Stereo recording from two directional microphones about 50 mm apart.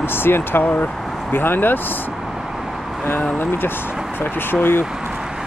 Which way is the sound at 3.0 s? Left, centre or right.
Left.